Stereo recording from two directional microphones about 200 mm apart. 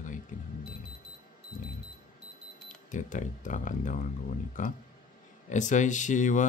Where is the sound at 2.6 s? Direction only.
40° left (ahead or behind).